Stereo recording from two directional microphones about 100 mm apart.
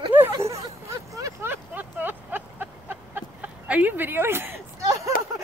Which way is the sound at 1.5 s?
20° right (ahead or behind).